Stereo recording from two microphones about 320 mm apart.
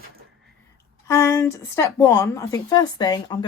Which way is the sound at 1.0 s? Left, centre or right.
Centre.